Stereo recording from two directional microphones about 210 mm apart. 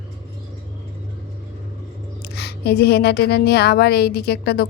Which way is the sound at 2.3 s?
50° left (ahead or behind).